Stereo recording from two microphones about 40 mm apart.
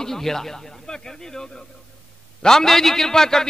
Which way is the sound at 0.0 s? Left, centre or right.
Centre.